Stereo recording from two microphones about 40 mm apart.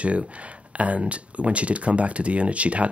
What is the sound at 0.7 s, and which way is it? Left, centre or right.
Speech, right.